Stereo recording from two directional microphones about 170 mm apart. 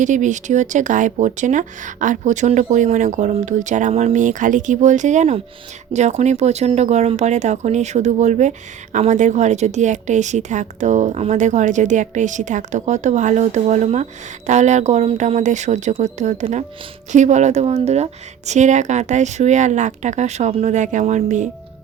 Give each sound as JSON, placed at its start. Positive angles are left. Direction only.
{"t": 0.0, "sound": "speech", "side_deg": -45}